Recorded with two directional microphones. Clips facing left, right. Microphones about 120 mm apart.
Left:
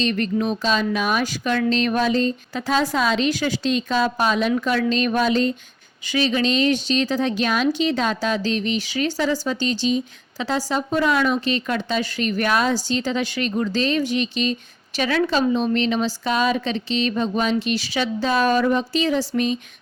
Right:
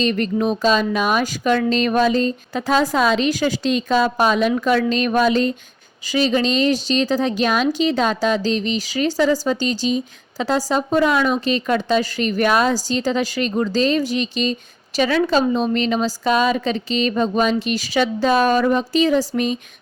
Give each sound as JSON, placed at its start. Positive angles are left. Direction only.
{"t": 0.0, "sound": "a woman's voice", "side_deg": -35}